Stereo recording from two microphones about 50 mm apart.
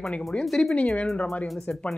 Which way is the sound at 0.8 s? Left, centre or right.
Left.